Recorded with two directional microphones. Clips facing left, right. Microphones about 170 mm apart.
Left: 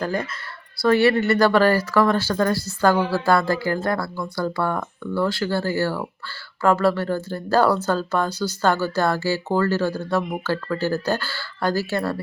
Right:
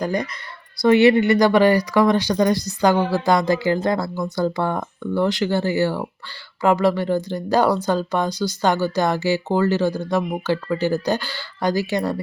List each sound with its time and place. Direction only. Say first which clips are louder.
0.0 s speech: right 2 dB; 15° right (ahead or behind)